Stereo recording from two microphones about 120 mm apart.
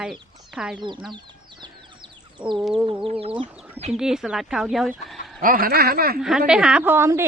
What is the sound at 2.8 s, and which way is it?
Chicken, 50° right (ahead or behind).